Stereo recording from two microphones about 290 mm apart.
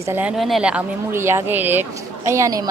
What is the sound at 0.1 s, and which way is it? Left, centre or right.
Speech, centre.